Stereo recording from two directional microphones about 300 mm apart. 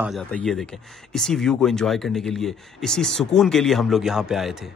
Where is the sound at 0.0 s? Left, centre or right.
Centre.